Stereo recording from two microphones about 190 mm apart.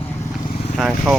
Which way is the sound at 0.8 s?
Centre (ahead or behind).